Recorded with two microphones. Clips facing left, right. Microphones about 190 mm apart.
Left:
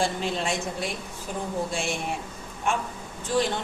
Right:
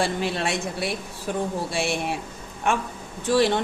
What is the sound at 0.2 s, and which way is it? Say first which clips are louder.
Speech: right 2 dB; 70° right (ahead or behind).